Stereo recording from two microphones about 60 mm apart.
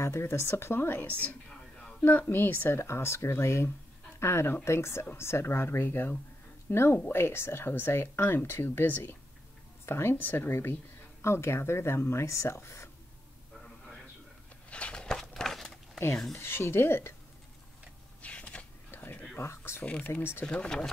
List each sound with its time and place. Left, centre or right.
0.0 s speech: left
2.8 s speech: left
9.8 s speech: left
10.1 s speech: left
14.7 s a sound: centre
16.3 s speech: left
18.2 s a sound: left
18.9 s a sound: left
19.3 s speech: left
19.8 s speech: left
20.1 s speech: left
20.4 s speech: centre